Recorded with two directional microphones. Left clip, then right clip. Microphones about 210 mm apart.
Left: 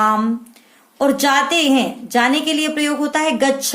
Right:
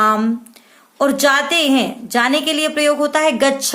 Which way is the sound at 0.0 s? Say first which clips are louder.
Right 1 dB; 30° right (ahead or behind).